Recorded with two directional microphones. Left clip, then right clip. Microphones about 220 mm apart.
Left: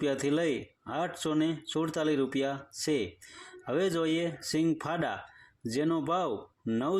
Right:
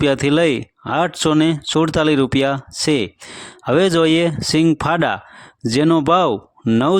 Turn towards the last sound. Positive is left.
turn(degrees=-45)  # may be behind; listen again after turning